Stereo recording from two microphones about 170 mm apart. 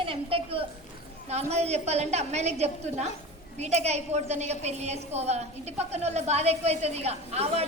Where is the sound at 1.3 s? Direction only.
40° right (ahead or behind).